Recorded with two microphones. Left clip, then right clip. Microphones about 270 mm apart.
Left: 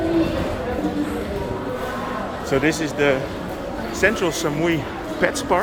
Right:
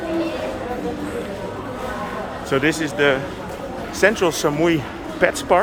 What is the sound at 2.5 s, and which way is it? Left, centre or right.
Speech, centre.